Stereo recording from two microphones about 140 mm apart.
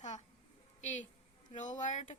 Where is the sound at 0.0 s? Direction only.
55° left (ahead or behind).